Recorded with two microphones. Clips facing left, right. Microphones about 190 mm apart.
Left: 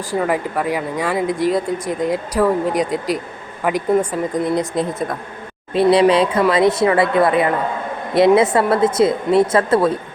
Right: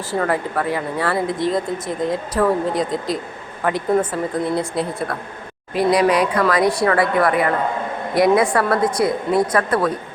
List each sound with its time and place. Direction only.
0.1 s a woman's voice: 15° left (ahead or behind)